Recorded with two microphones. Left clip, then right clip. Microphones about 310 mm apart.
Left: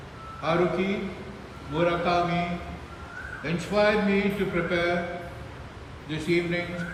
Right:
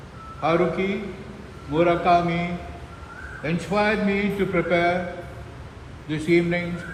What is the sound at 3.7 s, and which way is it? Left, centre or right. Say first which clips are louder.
A man's voice: even; right.